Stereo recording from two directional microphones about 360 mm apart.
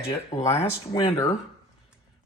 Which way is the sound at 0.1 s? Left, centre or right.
Centre.